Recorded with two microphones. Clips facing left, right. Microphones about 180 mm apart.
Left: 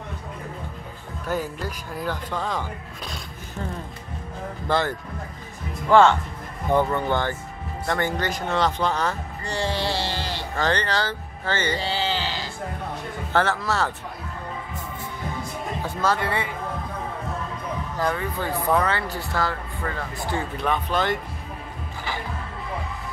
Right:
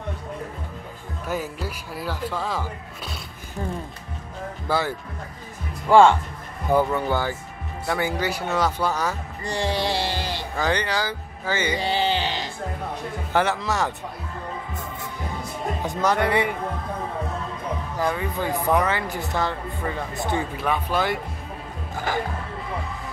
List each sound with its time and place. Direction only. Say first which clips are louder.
1.2 s speech: left 1 dB; 10° right (ahead or behind)
4.6 s speech: left 1 dB; 5° right (ahead or behind)
17.9 s speech: even; 15° right (ahead or behind)
20.5 s speech: even; 10° right (ahead or behind)